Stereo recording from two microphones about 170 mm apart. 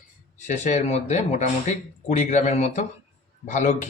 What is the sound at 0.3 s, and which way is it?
Speech, 45° left (ahead or behind).